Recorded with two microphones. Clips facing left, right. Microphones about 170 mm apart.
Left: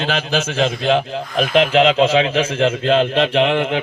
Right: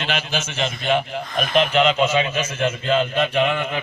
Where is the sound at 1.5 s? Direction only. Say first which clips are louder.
Left 4 dB; 90° left.